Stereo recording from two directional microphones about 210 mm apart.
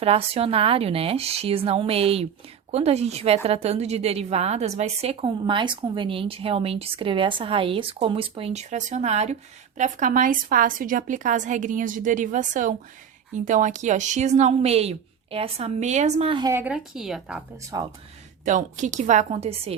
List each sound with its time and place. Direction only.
0.0 s a woman's voice: 30° right (ahead or behind); by 17.4 s 5° right (ahead or behind)
17.7 s a woman's voice: 20° right (ahead or behind)
18.4 s a woman's voice: 35° right (ahead or behind)